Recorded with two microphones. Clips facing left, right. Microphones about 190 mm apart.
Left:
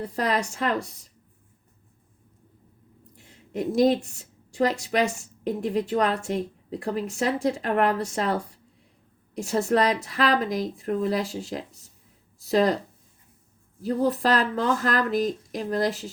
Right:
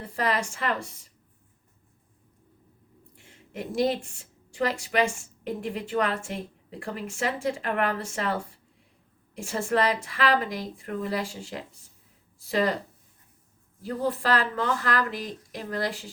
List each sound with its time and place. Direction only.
0.0 s a woman's voice: 40° left (ahead or behind)
3.2 s a woman's voice: 40° left (ahead or behind)
13.8 s a woman's voice: 40° left (ahead or behind)